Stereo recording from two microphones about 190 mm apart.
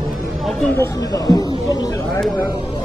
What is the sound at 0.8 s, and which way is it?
Speech, 15° left (ahead or behind).